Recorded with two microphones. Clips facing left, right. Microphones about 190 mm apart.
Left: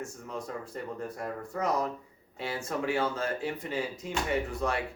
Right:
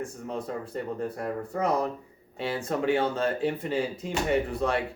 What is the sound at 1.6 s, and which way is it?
Speech, 55° right (ahead or behind).